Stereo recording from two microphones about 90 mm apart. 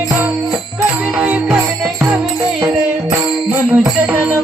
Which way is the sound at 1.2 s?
15° right (ahead or behind).